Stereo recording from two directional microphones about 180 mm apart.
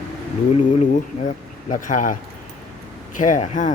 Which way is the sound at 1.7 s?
45° left (ahead or behind).